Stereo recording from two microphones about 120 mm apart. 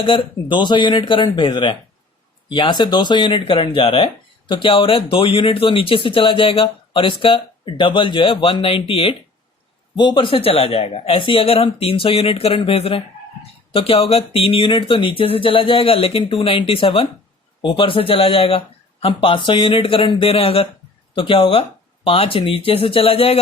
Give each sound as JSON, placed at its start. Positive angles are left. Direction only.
{"t": 0.0, "sound": "speech", "side_deg": 45}